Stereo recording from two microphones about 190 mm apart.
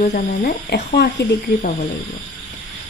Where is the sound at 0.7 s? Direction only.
60° left (ahead or behind).